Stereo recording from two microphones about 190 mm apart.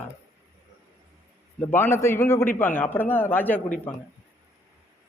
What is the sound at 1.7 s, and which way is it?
A man's voice, 10° left (ahead or behind).